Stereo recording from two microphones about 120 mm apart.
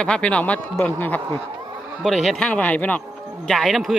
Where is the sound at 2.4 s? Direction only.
10° left (ahead or behind).